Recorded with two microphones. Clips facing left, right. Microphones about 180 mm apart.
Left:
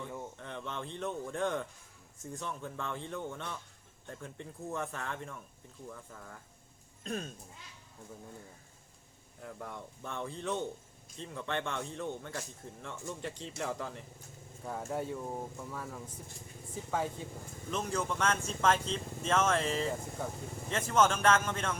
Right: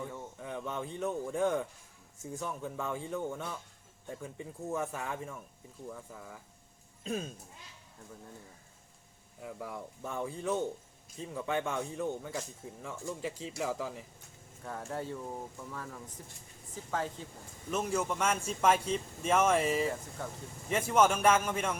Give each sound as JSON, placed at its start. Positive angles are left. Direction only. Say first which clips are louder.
{"t": 0.3, "sound": "speech", "louder": "right 3 dB", "side_deg": -5}
{"t": 9.4, "sound": "speech", "louder": "right 3 dB", "side_deg": -5}
{"t": 14.6, "sound": "speech", "louder": "left 2 dB", "side_deg": 5}
{"t": 17.7, "sound": "speech", "louder": "right 2 dB", "side_deg": -10}